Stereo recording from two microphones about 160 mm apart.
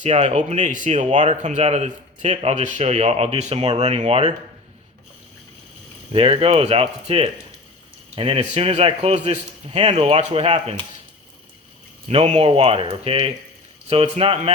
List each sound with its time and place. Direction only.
0.0 s speech: 45° right (ahead or behind)
6.1 s speech: 35° right (ahead or behind)
12.0 s speech: 40° right (ahead or behind)